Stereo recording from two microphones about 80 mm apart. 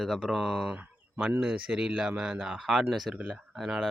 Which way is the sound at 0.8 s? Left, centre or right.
Centre.